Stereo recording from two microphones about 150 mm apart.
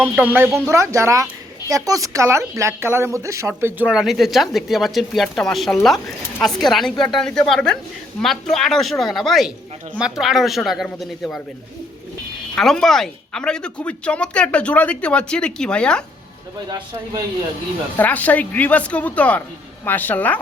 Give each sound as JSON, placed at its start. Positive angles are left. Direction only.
{"t": 0.0, "sound": "speech", "side_deg": -10}
{"t": 12.5, "sound": "speech", "side_deg": 5}
{"t": 16.6, "sound": "speech", "side_deg": -30}
{"t": 17.9, "sound": "speech", "side_deg": 10}